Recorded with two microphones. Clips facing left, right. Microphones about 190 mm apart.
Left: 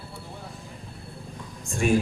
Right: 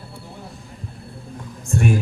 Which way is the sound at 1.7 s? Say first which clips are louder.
Right 3 dB; 60° right (ahead or behind).